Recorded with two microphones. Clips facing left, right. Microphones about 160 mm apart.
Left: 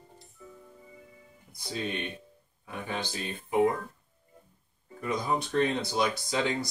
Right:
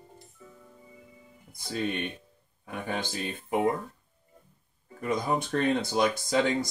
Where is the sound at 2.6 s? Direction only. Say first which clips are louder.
Right 2 dB; 50° right (ahead or behind).